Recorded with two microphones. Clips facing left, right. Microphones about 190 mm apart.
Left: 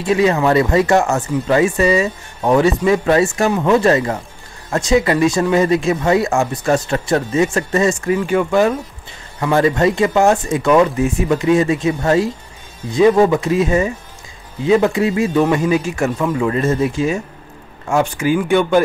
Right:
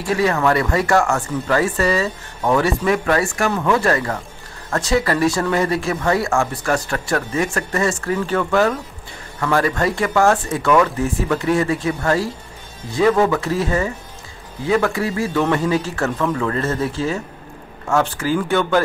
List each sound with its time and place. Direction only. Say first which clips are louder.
0.0 s a man's voice: left 3 dB; 20° left (ahead or behind)